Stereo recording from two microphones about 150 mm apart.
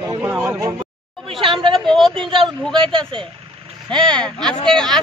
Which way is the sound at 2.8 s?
35° right (ahead or behind).